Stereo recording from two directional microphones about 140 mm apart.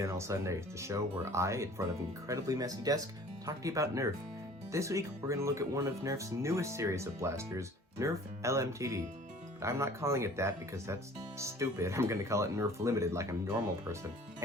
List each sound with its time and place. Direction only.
0.0 s speech: 20° right (ahead or behind)